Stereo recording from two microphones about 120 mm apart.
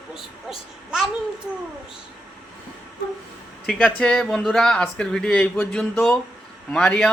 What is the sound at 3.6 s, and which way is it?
Speech, centre (ahead or behind).